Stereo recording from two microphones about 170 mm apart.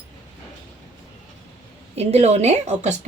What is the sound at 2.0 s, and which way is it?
Speech, 40° right (ahead or behind).